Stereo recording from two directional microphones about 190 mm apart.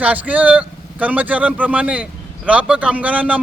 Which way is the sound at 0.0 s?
10° right (ahead or behind).